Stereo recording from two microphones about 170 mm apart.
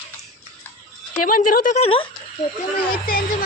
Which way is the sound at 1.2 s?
55° left (ahead or behind).